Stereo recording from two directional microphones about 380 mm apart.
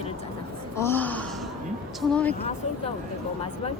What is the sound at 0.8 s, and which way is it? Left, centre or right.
Speech, centre.